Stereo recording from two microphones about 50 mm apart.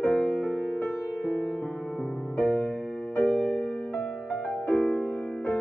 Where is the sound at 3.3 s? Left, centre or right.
Centre.